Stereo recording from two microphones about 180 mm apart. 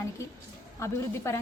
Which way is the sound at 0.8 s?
15° left (ahead or behind).